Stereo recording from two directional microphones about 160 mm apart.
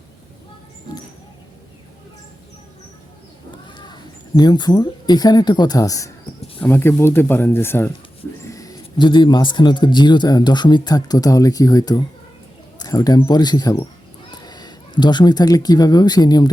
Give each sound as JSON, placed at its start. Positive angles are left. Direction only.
{"t": 4.4, "sound": "a man's voice", "side_deg": 25}